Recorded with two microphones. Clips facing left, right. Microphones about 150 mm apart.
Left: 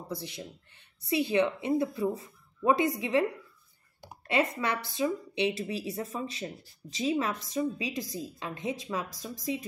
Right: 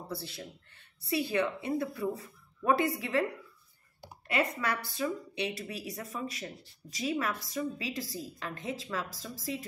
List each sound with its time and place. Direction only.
0.1 s speech: 15° left (ahead or behind)
4.3 s speech: 25° left (ahead or behind)